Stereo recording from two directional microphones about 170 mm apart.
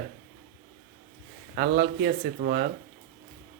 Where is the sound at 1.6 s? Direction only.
65° right (ahead or behind).